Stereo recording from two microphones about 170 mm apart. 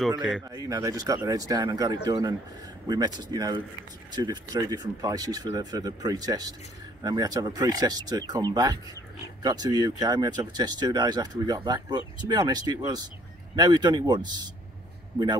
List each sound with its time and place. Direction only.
0.5 s speech: 25° right (ahead or behind)